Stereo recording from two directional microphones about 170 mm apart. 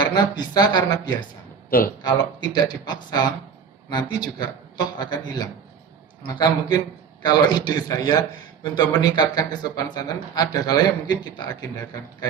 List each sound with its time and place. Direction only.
0.0 s speech: 25° left (ahead or behind)
1.7 s speech: 60° left (ahead or behind)
2.4 s speech: 25° left (ahead or behind)